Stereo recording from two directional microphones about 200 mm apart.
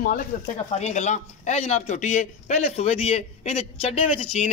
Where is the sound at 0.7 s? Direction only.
35° left (ahead or behind).